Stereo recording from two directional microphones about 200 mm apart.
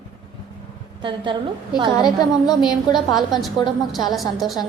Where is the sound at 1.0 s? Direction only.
25° right (ahead or behind).